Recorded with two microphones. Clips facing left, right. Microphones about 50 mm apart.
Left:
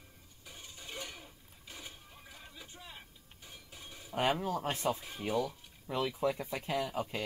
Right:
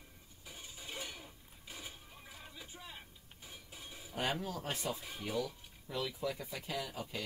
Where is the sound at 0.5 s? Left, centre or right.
Centre.